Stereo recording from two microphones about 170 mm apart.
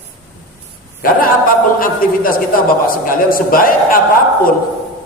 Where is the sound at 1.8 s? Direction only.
55° left (ahead or behind).